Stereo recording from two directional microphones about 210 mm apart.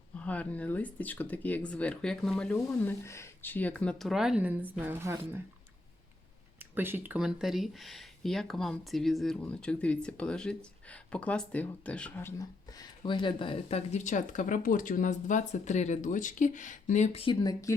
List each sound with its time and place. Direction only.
0.1 s a woman's voice: 5° left (ahead or behind); by 5.4 s 10° right (ahead or behind)
6.6 s speech: 10° right (ahead or behind); by 17.7 s 15° left (ahead or behind)